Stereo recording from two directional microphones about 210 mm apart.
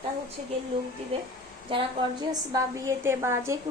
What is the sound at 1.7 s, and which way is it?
Speech, 25° right (ahead or behind).